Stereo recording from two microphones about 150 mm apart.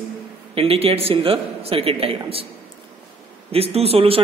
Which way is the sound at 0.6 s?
40° right (ahead or behind).